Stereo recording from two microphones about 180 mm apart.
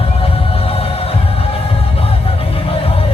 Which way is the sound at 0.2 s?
30° left (ahead or behind).